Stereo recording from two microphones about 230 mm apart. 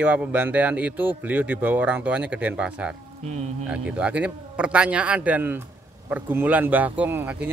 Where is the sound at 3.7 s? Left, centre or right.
Centre.